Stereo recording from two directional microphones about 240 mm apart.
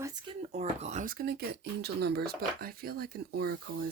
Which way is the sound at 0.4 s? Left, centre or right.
Right.